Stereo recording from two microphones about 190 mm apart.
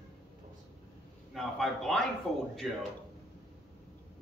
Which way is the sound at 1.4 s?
Centre (ahead or behind).